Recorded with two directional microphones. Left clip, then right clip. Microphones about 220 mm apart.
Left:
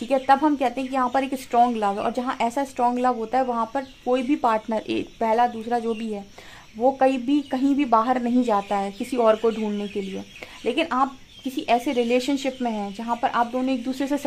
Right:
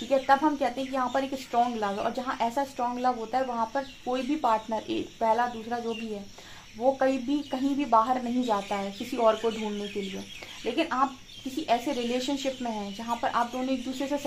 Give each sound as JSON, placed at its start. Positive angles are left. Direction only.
{"t": 0.1, "sound": "a woman's voice", "side_deg": 45}
{"t": 10.6, "sound": "a woman's voice", "side_deg": 45}